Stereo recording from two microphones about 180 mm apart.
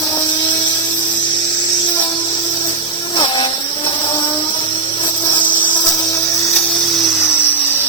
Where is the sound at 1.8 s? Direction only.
25° left (ahead or behind).